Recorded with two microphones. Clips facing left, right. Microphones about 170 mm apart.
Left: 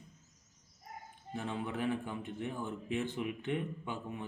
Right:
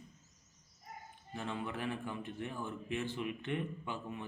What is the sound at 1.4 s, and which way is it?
Speech, 15° left (ahead or behind).